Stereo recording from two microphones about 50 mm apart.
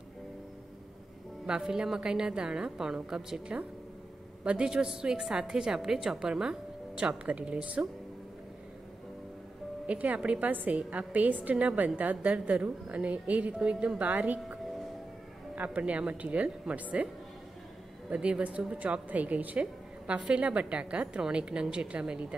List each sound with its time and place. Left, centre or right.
1.4 s a woman's voice: centre
9.8 s a woman's voice: right
13.6 s a woman's voice: centre
18.1 s a woman's voice: right